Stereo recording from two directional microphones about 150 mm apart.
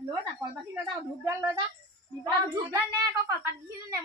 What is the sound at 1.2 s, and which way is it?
A woman's voice, 15° right (ahead or behind).